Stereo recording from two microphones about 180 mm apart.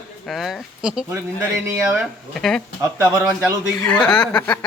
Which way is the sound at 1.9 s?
Centre (ahead or behind).